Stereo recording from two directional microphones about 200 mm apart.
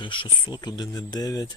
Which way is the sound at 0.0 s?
25° left (ahead or behind).